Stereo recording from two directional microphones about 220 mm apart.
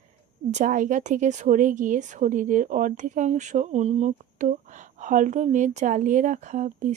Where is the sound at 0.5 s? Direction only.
35° right (ahead or behind).